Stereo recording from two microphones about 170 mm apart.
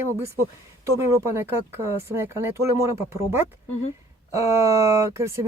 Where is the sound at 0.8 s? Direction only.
15° right (ahead or behind).